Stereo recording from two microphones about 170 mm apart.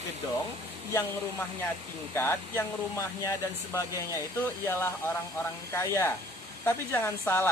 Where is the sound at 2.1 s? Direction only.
15° left (ahead or behind).